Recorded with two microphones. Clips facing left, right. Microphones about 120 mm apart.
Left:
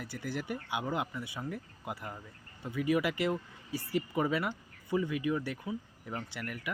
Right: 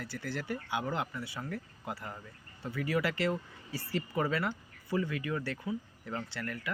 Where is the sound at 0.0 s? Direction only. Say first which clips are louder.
Left 1 dB; 15° left (ahead or behind).